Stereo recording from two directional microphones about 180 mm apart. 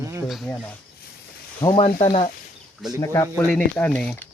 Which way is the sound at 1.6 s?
30° left (ahead or behind).